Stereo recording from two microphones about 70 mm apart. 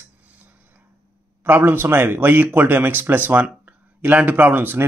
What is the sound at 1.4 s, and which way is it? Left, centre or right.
A man's voice, right.